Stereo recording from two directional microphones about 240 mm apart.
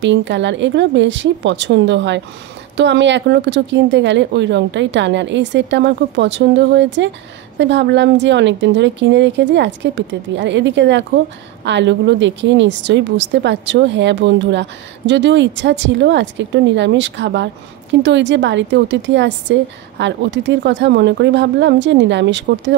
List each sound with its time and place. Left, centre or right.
0.0 s speech: right